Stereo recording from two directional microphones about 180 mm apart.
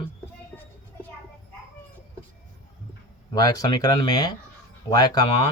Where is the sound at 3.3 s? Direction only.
20° left (ahead or behind).